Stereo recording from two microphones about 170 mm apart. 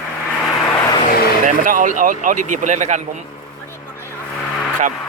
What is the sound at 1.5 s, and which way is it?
Speech, 50° right (ahead or behind).